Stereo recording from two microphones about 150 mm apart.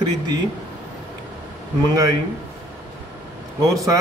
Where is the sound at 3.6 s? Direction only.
20° right (ahead or behind).